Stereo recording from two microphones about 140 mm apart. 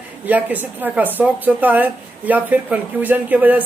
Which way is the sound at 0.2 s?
10° right (ahead or behind).